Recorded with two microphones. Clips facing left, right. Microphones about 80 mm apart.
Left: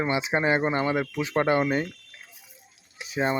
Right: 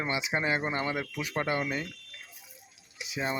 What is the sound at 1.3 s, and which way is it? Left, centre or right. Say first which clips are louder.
Speech: left 8 dB; left.